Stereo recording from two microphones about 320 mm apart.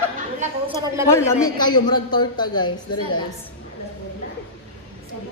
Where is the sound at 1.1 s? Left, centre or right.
Centre.